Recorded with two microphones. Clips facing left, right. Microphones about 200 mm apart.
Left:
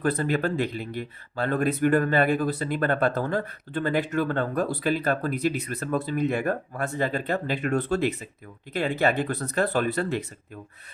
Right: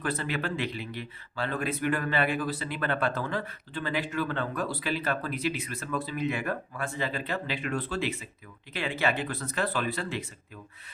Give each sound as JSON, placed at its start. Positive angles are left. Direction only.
{"t": 0.0, "sound": "speech", "side_deg": 40}